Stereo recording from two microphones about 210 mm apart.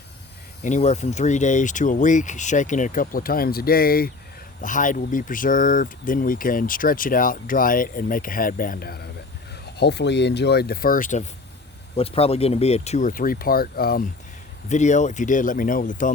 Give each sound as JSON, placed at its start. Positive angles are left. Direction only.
{"t": 0.6, "sound": "speech", "side_deg": 35}
{"t": 11.9, "sound": "speech", "side_deg": 25}
{"t": 14.7, "sound": "speech", "side_deg": 35}